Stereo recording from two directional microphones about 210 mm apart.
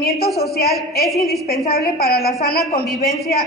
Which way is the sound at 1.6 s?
50° left (ahead or behind).